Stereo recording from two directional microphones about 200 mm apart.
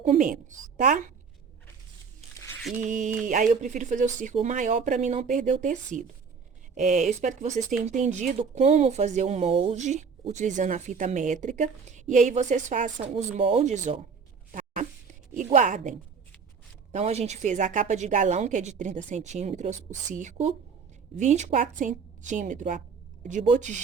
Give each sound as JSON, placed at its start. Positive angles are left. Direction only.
{"t": 0.0, "sound": "speech", "side_deg": -35}
{"t": 2.8, "sound": "speech", "side_deg": -40}
{"t": 15.4, "sound": "speech", "side_deg": -40}